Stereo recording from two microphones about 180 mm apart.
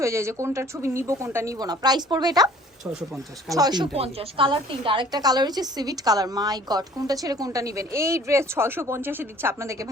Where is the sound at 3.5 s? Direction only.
20° right (ahead or behind).